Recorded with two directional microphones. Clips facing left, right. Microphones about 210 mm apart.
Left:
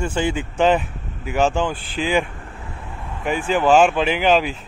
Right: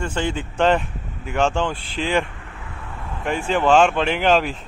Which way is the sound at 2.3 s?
40° left (ahead or behind).